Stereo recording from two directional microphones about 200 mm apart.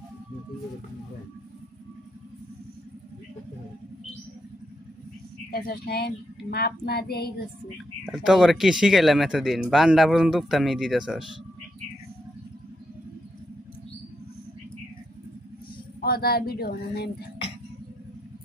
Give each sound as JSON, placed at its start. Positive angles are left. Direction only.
{"t": 5.5, "sound": "speech", "side_deg": 50}
{"t": 8.0, "sound": "speech", "side_deg": 0}
{"t": 16.0, "sound": "speech", "side_deg": 50}